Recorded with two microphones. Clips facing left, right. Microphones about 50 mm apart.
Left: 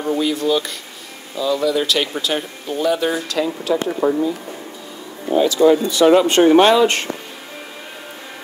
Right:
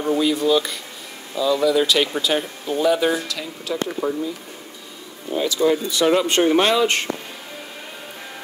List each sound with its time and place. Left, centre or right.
0.0 s speech: centre
3.3 s speech: left
5.4 s speech: left